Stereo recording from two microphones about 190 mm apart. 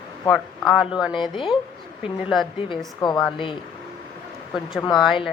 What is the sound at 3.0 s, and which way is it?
Speech, 25° left (ahead or behind).